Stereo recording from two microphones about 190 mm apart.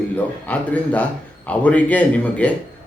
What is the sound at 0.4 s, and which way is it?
Speech, 10° left (ahead or behind).